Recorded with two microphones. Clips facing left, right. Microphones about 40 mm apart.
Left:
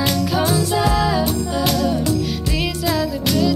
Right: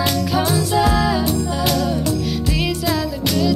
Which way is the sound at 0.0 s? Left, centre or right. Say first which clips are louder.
Even; centre.